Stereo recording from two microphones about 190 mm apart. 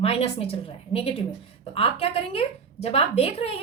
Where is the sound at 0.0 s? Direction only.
30° left (ahead or behind).